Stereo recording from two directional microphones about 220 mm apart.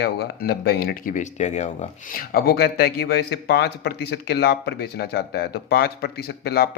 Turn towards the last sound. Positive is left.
turn(degrees=45)  # may be behind; listen again after turning